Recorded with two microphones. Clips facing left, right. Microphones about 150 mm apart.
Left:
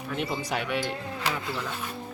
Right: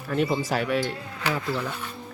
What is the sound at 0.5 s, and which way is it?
Speech, centre (ahead or behind).